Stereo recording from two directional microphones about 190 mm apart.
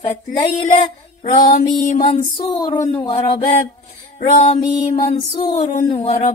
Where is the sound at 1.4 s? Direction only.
40° left (ahead or behind); by 2.8 s 20° left (ahead or behind).